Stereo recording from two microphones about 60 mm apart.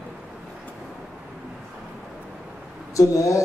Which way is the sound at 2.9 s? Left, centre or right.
Left.